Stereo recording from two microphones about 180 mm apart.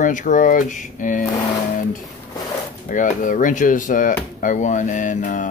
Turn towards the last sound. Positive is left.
turn(degrees=45)  # may be behind; listen again after turning